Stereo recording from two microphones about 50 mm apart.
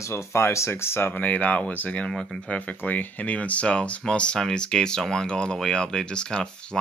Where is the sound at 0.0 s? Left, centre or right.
Left.